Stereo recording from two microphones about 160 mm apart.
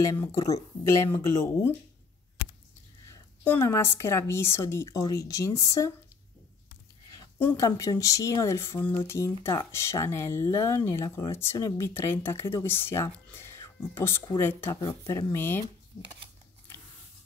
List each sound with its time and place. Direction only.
0.0 s speech: 20° left (ahead or behind)
3.1 s a woman's voice: 15° left (ahead or behind)
7.1 s speech: 15° left (ahead or behind)